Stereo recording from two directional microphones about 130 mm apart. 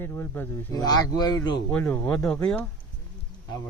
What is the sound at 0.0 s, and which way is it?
Speech, 15° left (ahead or behind).